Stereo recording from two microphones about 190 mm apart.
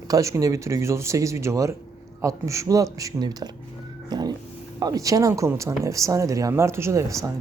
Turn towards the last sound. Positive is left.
turn(degrees=-15)  # may be behind; listen again after turning